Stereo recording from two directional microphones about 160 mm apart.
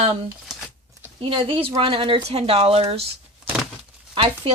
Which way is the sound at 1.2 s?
30° right (ahead or behind).